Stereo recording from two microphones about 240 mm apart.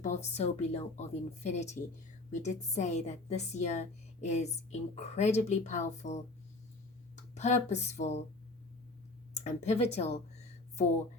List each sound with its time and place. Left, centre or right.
0.0 s a woman's voice: left
7.3 s a woman's voice: left
9.3 s a sound: left